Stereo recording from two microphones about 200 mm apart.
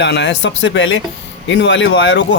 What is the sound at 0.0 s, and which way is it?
Speech, 60° left (ahead or behind).